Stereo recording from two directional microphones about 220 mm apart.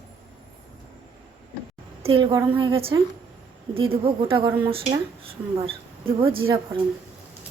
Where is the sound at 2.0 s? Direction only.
20° right (ahead or behind).